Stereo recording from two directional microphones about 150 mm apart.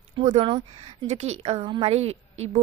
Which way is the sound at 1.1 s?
45° right (ahead or behind).